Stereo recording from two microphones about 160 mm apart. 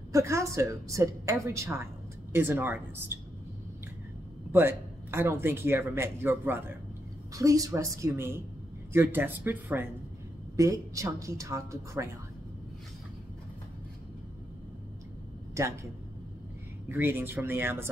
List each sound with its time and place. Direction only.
0.1 s a woman's voice: 20° right (ahead or behind)
4.5 s a woman's voice: 15° right (ahead or behind)
15.5 s speech: 20° right (ahead or behind)
16.9 s speech: 15° right (ahead or behind)